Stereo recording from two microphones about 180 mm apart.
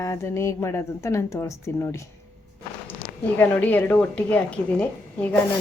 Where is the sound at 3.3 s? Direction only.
10° left (ahead or behind).